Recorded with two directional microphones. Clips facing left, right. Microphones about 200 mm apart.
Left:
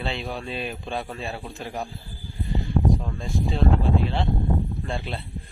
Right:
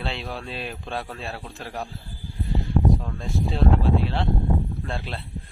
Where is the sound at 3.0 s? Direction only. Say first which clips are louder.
Even; 5° left (ahead or behind).